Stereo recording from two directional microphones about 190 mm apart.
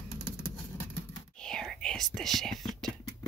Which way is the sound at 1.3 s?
5° left (ahead or behind).